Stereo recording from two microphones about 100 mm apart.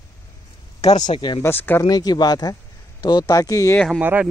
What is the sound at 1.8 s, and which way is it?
Speech, 40° left (ahead or behind).